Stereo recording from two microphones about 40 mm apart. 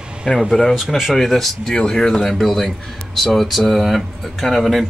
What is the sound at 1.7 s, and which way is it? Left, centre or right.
Speech, centre.